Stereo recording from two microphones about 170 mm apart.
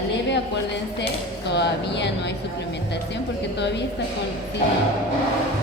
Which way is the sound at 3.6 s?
90° left.